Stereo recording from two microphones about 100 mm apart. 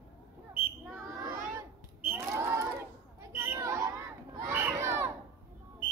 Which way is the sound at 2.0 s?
20° right (ahead or behind).